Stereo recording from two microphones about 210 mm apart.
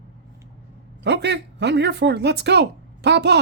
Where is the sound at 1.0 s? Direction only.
55° right (ahead or behind).